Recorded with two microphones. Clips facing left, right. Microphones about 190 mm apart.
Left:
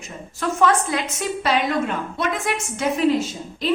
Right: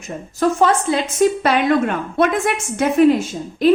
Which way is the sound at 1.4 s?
55° right (ahead or behind).